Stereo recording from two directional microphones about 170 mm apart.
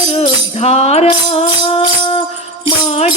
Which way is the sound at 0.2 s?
40° left (ahead or behind).